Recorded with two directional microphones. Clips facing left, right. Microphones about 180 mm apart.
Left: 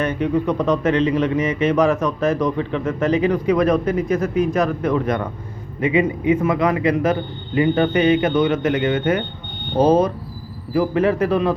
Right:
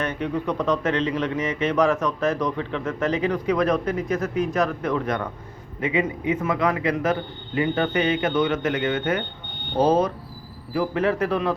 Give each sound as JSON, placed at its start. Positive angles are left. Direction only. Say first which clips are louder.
{"t": 0.0, "sound": "speech", "louder": "left 6 dB", "side_deg": 10}